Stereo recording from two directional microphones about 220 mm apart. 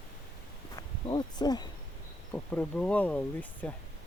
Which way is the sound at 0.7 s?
20° left (ahead or behind).